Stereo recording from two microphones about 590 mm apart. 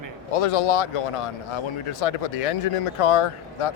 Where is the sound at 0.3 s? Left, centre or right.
Left.